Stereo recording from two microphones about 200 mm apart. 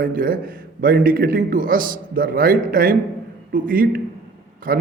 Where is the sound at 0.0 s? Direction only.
45° right (ahead or behind).